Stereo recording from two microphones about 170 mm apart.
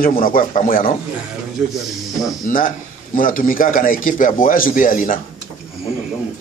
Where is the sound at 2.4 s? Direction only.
55° left (ahead or behind).